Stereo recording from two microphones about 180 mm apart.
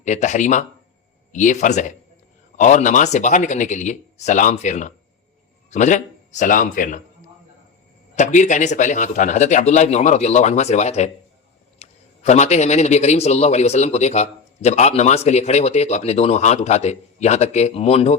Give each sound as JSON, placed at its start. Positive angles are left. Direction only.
{"t": 0.0, "sound": "speech", "side_deg": 40}
{"t": 8.1, "sound": "a man's voice", "side_deg": 40}